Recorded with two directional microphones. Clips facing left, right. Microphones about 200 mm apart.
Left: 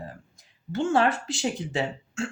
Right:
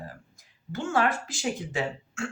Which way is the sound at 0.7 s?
30° left (ahead or behind).